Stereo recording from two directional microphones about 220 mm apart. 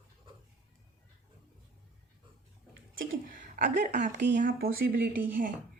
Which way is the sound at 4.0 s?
50° right (ahead or behind).